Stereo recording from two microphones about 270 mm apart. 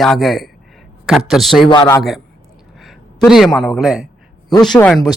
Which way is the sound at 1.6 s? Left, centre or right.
Centre.